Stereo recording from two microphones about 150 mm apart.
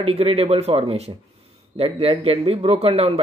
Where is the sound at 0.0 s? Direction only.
40° right (ahead or behind).